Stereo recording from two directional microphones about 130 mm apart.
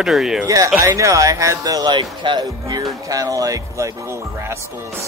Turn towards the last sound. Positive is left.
turn(degrees=-25)  # may be behind; listen again after turning